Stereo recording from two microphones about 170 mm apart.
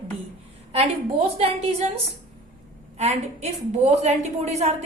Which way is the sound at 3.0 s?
40° right (ahead or behind).